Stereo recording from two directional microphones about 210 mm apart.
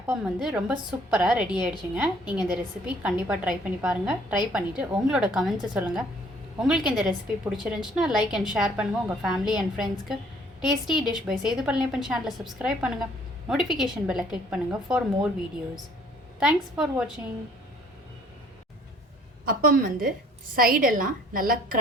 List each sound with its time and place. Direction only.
0.1 s a woman's voice: 5° right (ahead or behind)
16.4 s a woman's voice: 5° right (ahead or behind)
19.5 s a woman's voice: 40° right (ahead or behind)